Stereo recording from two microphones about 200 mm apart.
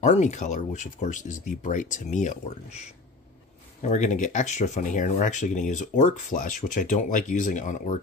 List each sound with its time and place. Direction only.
0.0 s speech: 35° left (ahead or behind)
3.8 s speech: 40° left (ahead or behind)